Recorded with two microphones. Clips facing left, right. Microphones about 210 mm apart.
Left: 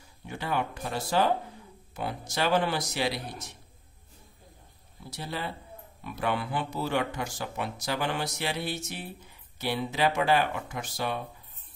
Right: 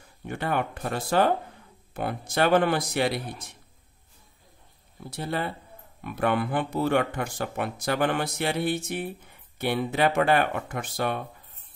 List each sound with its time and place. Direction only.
0.3 s speech: 55° right (ahead or behind)
5.1 s speech: 55° right (ahead or behind)